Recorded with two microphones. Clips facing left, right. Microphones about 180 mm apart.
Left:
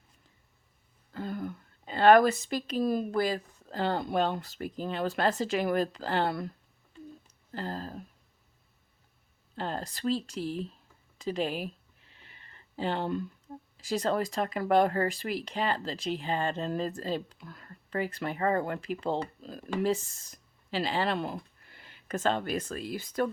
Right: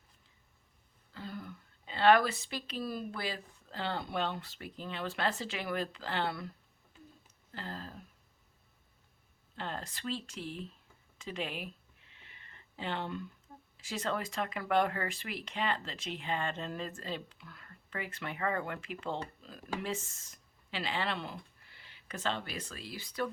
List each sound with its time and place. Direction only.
1.1 s a woman's voice: 50° left (ahead or behind)
7.5 s speech: 40° left (ahead or behind)
9.6 s speech: 40° left (ahead or behind)
11.2 s a sound: 35° left (ahead or behind)
13.7 s speech: 35° left (ahead or behind)